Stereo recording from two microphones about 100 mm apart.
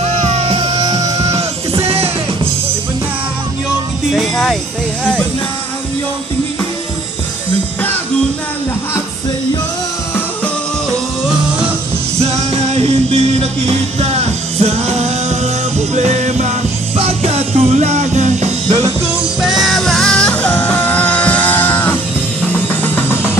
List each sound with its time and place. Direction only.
0.2 s music: 90° right; by 0.8 s 65° right (ahead or behind)
0.8 s music: 40° right (ahead or behind)
4.1 s speech: centre (ahead or behind)
12.2 s music: 90° right
19.4 s music: centre (ahead or behind); by 23.3 s 20° left (ahead or behind)